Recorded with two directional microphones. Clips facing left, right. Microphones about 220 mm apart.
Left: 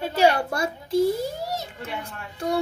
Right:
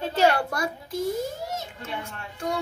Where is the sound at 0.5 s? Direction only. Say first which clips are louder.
Left 6 dB; 30° left (ahead or behind).